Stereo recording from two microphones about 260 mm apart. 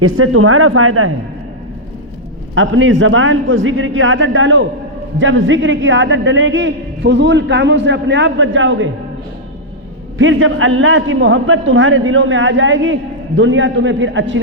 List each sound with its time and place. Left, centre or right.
0.0 s a man's voice: right
2.6 s a man's voice: right
10.2 s a man's voice: right